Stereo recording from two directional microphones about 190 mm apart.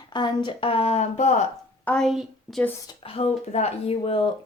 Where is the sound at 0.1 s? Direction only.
25° left (ahead or behind).